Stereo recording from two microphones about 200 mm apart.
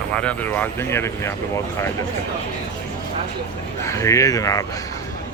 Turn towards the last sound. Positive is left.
turn(degrees=15)  # may be behind; listen again after turning